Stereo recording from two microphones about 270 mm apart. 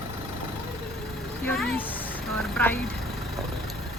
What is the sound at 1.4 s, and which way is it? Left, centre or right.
Vehicle, centre.